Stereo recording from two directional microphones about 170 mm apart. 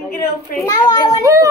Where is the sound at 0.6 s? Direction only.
20° left (ahead or behind).